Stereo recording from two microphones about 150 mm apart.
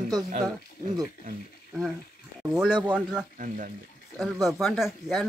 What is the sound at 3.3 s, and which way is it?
Speech, 65° right (ahead or behind).